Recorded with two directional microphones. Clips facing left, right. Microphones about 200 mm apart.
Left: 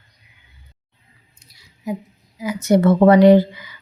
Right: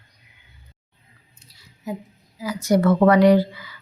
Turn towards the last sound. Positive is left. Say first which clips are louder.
# left 5 dB
turn(degrees=20)  # may be behind; listen again after turning